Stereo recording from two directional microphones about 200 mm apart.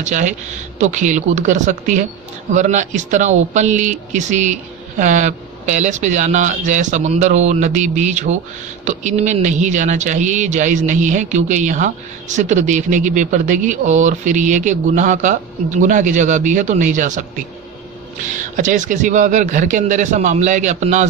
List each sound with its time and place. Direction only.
0.0 s speech: 35° right (ahead or behind)
18.3 s speech: 40° right (ahead or behind)